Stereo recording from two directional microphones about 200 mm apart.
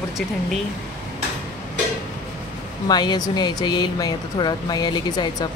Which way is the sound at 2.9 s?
20° left (ahead or behind).